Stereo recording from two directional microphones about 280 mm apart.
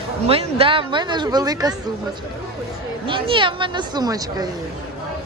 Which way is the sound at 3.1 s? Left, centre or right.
Centre.